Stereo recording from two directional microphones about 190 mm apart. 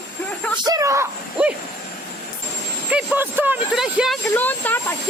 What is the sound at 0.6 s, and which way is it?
Speech, 20° right (ahead or behind).